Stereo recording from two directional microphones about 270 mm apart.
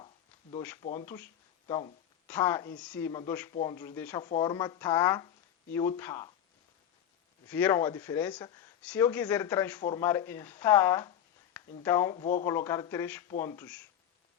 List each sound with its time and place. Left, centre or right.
0.8 s speech: left
1.0 s speech: centre
1.6 s speech: centre
2.2 s speech: centre
3.1 s speech: centre
7.4 s speech: centre
11.6 s a sound: centre
11.9 s speech: centre